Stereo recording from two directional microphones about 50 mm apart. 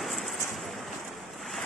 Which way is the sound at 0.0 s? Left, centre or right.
Centre.